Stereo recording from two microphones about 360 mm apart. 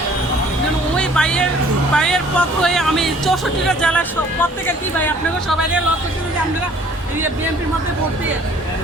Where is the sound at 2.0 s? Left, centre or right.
Centre.